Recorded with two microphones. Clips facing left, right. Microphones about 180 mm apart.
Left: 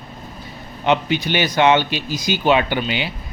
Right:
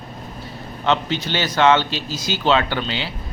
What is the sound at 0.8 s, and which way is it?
Speech, 15° left (ahead or behind).